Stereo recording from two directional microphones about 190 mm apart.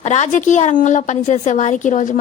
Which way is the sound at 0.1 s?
40° left (ahead or behind).